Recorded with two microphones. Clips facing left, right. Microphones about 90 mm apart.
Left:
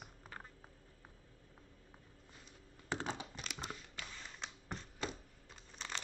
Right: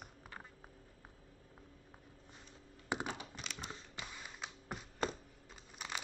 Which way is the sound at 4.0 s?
10° right (ahead or behind).